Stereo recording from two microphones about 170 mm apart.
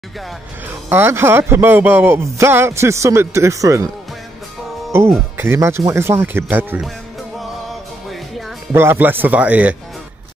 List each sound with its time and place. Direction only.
0.8 s speech: 15° right (ahead or behind)
4.9 s speech: 15° right (ahead or behind)
8.7 s speech: 15° right (ahead or behind)